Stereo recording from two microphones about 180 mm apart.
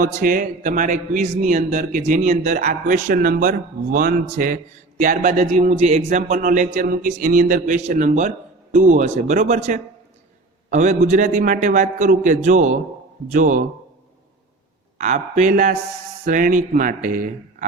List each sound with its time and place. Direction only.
0.0 s a man's voice: 50° right (ahead or behind)
14.9 s a man's voice: 40° right (ahead or behind)